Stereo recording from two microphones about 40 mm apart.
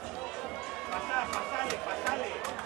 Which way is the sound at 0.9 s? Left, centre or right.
Centre.